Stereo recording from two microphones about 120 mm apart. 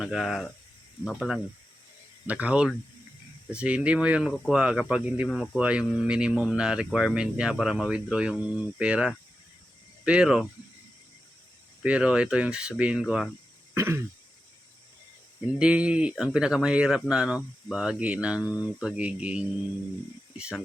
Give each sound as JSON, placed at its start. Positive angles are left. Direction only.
{"t": 0.0, "sound": "speech", "side_deg": 0}
{"t": 2.2, "sound": "speech", "side_deg": -10}
{"t": 11.8, "sound": "speech", "side_deg": -10}
{"t": 13.7, "sound": "throat clearing", "side_deg": -20}
{"t": 15.5, "sound": "speech", "side_deg": -10}